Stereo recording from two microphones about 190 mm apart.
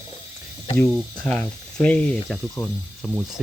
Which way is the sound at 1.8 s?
5° left (ahead or behind).